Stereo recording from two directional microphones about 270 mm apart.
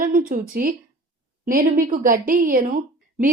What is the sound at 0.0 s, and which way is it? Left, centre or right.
A woman's voice, right.